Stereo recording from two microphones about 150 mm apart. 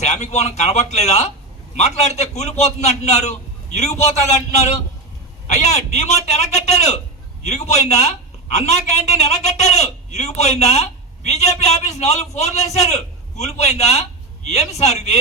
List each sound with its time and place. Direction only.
0.0 s a man's voice: 50° left (ahead or behind)